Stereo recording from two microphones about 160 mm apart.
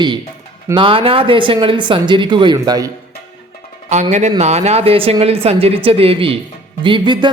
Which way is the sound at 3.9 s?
45° right (ahead or behind).